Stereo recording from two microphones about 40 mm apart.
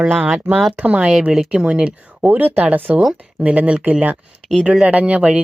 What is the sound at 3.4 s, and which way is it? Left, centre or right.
Speech, right.